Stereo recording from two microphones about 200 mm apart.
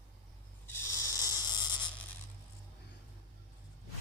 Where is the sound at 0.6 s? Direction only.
10° left (ahead or behind).